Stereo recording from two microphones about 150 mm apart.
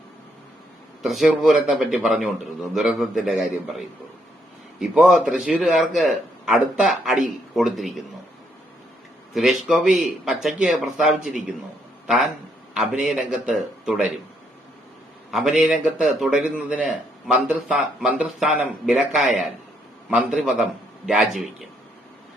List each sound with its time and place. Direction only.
1.0 s a man's voice: centre (ahead or behind)
9.3 s a man's voice: centre (ahead or behind)
12.7 s a man's voice: 5° right (ahead or behind)
15.3 s a man's voice: 5° right (ahead or behind)